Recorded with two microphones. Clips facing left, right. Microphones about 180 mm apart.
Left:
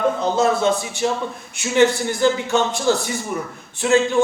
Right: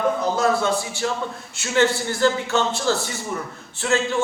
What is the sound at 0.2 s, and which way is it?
A man's voice, 25° left (ahead or behind).